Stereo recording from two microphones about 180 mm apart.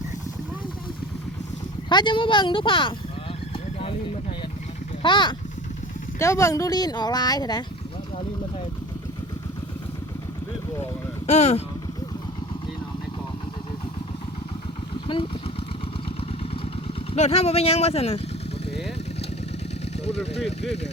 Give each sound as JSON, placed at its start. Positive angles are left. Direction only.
{"t": 1.9, "sound": "speech", "side_deg": 25}
{"t": 5.0, "sound": "speech", "side_deg": 25}
{"t": 6.1, "sound": "speech", "side_deg": 15}
{"t": 11.3, "sound": "speech", "side_deg": 40}
{"t": 15.0, "sound": "speech", "side_deg": 25}
{"t": 16.6, "sound": "vehicle", "side_deg": 35}
{"t": 20.1, "sound": "speech", "side_deg": 35}